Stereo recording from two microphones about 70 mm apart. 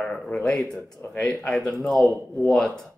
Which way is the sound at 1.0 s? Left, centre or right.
Left.